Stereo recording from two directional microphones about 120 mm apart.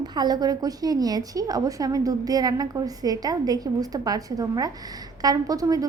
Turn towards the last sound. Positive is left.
turn(degrees=-30)  # may be behind; listen again after turning